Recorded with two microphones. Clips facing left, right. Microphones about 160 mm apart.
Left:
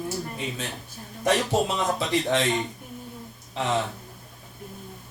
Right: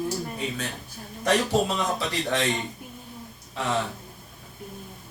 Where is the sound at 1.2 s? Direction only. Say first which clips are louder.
Even; 20° left (ahead or behind).